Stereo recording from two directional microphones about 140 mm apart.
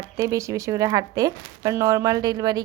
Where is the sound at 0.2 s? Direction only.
25° right (ahead or behind).